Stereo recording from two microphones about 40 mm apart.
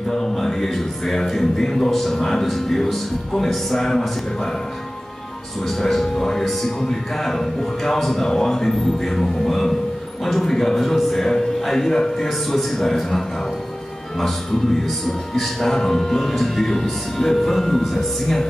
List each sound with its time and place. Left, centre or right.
0.1 s speech: centre
5.7 s speech: centre
14.9 s speech: centre